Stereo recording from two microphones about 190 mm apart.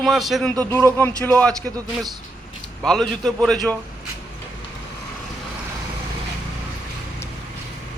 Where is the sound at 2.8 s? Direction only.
Centre (ahead or behind).